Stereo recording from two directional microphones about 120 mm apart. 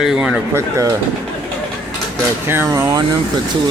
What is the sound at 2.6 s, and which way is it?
Speech, 30° right (ahead or behind).